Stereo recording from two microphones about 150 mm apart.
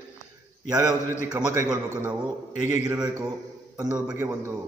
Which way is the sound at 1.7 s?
10° right (ahead or behind).